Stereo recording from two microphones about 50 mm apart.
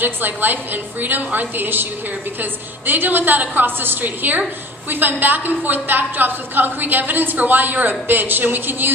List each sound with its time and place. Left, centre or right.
0.0 s a woman's voice: right